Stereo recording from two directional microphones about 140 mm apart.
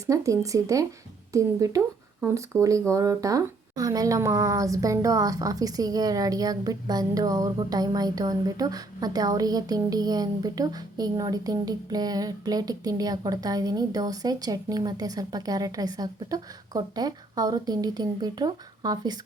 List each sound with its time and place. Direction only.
0.1 s speech: 25° right (ahead or behind)